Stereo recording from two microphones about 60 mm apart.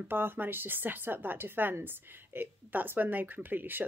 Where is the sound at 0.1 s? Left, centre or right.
Right.